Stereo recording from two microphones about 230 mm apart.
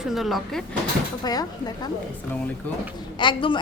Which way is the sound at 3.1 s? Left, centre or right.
Left.